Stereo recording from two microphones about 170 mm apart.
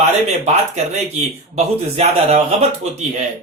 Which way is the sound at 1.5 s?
35° right (ahead or behind).